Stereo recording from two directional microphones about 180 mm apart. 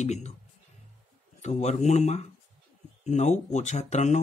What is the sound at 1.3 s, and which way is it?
Speech, 40° left (ahead or behind).